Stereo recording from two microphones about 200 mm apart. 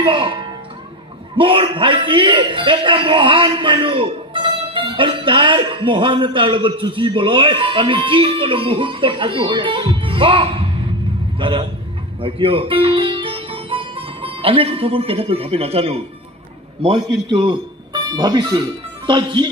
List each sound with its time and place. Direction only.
0.0 s a man's voice: 25° right (ahead or behind)